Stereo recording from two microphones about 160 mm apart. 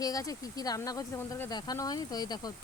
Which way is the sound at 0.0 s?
20° left (ahead or behind).